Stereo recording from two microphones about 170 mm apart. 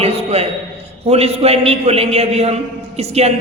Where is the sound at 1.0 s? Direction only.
35° right (ahead or behind).